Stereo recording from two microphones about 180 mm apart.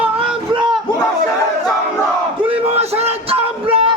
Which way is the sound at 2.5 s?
35° right (ahead or behind).